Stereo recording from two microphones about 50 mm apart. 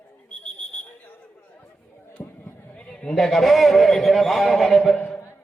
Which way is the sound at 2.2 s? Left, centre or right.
Left.